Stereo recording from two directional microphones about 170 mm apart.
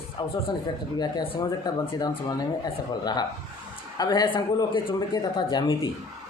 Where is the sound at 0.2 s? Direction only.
25° left (ahead or behind).